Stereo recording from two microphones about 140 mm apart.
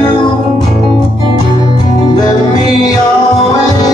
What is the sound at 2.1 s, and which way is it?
Music, 30° left (ahead or behind).